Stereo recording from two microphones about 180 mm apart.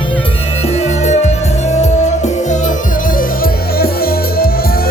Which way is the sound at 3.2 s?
55° left (ahead or behind).